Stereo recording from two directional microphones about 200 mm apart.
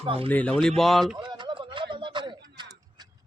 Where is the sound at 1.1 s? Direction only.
20° right (ahead or behind).